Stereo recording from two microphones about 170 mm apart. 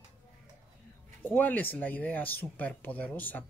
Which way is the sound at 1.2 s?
10° left (ahead or behind).